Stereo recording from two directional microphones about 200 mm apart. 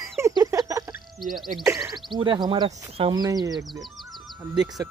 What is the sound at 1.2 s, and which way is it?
Speech, centre (ahead or behind).